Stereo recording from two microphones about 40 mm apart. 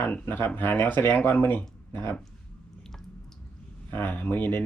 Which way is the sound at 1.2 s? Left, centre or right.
Left.